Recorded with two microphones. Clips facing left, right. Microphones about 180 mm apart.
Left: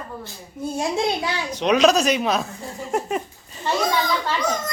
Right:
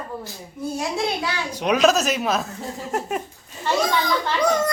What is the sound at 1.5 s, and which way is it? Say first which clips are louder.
Speech: left 1 dB; 5° right (ahead or behind).